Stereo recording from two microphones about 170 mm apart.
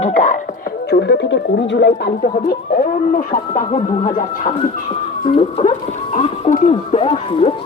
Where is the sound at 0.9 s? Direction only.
90° left.